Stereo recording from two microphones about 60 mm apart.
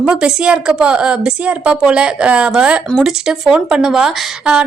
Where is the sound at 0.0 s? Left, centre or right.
Centre.